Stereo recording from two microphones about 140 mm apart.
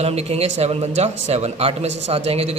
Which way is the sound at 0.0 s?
45° right (ahead or behind).